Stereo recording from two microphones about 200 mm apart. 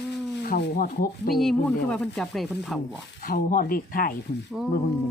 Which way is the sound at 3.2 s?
45° left (ahead or behind).